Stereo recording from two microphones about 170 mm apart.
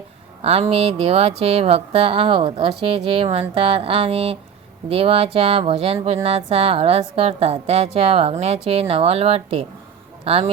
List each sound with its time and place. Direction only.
0.4 s a woman's voice: 40° right (ahead or behind)